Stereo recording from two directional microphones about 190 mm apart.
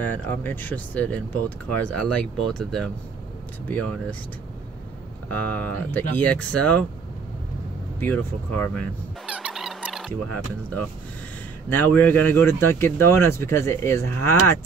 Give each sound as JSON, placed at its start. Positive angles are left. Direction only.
{"t": 0.0, "sound": "speech", "side_deg": 10}
{"t": 5.3, "sound": "speech", "side_deg": 10}
{"t": 8.0, "sound": "speech", "side_deg": 10}
{"t": 9.2, "sound": "a sound", "side_deg": -5}
{"t": 11.7, "sound": "speech", "side_deg": 10}